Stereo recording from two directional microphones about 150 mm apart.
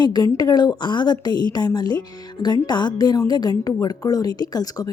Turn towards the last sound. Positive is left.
turn(degrees=25)  # may be behind; listen again after turning